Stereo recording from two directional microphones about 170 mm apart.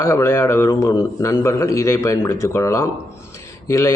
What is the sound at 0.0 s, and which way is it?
A man's voice, 15° left (ahead or behind).